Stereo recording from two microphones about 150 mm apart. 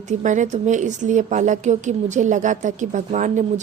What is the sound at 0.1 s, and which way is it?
A woman's voice, 55° right (ahead or behind).